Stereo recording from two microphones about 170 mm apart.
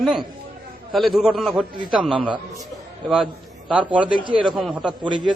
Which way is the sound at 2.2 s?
30° right (ahead or behind).